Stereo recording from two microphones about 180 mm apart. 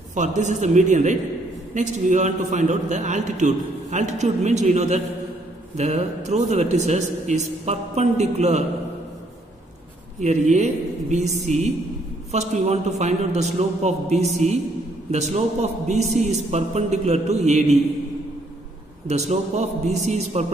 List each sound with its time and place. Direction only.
0.1 s a man's voice: 40° right (ahead or behind)
10.2 s a man's voice: 40° right (ahead or behind)
19.0 s a man's voice: 40° right (ahead or behind)